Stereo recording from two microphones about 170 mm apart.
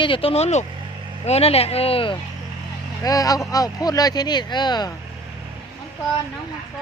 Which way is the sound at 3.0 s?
20° left (ahead or behind).